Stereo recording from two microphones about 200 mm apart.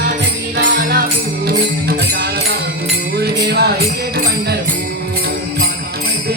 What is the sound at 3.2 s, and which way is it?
Music, 55° right (ahead or behind).